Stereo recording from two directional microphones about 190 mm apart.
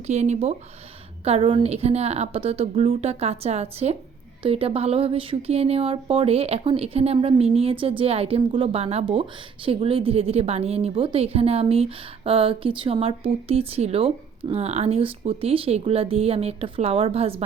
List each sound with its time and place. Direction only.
0.1 s a woman's voice: 35° right (ahead or behind)